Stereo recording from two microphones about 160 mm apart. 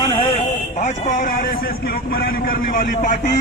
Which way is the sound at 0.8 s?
50° left (ahead or behind).